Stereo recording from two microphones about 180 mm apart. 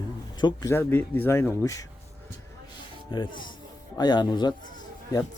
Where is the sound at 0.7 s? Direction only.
10° left (ahead or behind).